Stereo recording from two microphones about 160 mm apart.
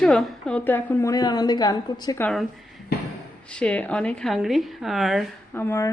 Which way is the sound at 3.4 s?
5° left (ahead or behind).